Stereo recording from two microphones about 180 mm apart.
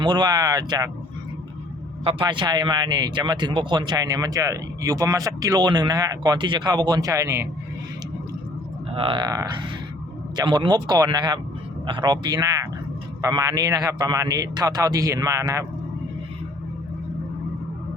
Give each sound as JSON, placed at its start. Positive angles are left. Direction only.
{"t": 0.0, "sound": "speech", "side_deg": -25}
{"t": 2.0, "sound": "speech", "side_deg": -30}
{"t": 8.9, "sound": "speech", "side_deg": -30}